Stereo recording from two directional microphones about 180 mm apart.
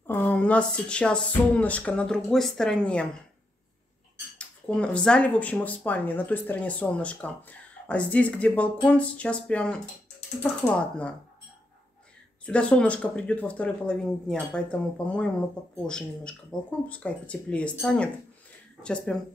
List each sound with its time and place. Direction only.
0.0 s speech: 10° left (ahead or behind)
4.4 s speech: 5° left (ahead or behind)
12.4 s speech: 5° left (ahead or behind)
16.5 s speech: 5° left (ahead or behind)